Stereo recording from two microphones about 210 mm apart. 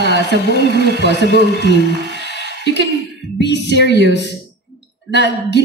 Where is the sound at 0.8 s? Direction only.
55° right (ahead or behind).